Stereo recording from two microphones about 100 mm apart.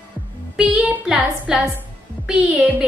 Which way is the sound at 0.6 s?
10° right (ahead or behind).